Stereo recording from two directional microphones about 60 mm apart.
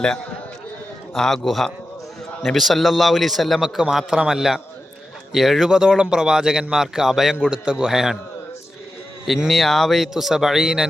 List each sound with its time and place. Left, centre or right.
1.1 s a man's voice: centre
3.8 s speech: centre
7.3 s speech: centre
9.2 s a man's voice: centre